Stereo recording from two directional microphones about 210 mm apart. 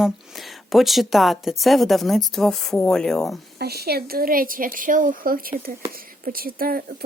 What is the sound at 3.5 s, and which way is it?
Speech, 50° right (ahead or behind).